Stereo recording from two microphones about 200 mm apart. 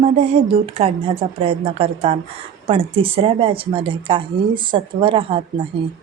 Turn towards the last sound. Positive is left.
turn(degrees=-25)  # may be behind; listen again after turning